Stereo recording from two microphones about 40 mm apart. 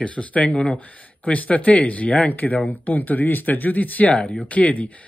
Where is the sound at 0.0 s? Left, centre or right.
Left.